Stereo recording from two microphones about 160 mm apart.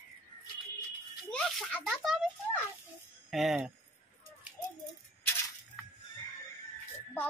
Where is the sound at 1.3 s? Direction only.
5° left (ahead or behind).